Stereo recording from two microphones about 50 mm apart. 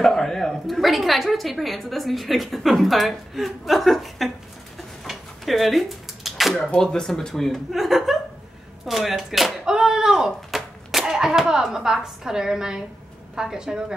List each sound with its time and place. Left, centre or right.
0.0 s a woman's voice: centre
4.7 s a sound: centre
6.5 s speech: centre
7.7 s a woman's voice: centre